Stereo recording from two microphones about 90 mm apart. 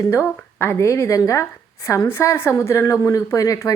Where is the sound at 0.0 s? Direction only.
30° left (ahead or behind).